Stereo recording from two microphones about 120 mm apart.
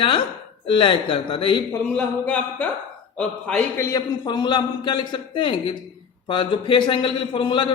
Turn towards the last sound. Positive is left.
turn(degrees=40)  # may be behind; listen again after turning